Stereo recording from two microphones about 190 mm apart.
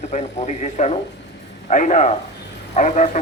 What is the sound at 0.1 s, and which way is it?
Speech, 40° left (ahead or behind).